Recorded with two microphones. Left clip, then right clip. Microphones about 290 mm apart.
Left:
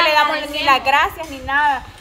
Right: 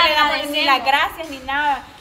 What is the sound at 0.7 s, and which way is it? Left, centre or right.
Speech, centre.